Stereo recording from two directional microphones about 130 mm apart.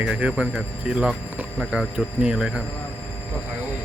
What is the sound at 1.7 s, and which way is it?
Speech, 5° right (ahead or behind).